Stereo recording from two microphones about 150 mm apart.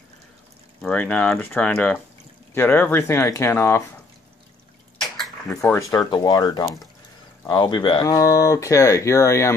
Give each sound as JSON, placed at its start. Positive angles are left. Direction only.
{"t": 0.8, "sound": "speech", "side_deg": 10}
{"t": 5.0, "sound": "a sound", "side_deg": 0}
{"t": 5.6, "sound": "speech", "side_deg": 20}